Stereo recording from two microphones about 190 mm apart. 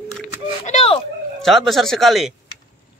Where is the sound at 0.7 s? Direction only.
35° left (ahead or behind).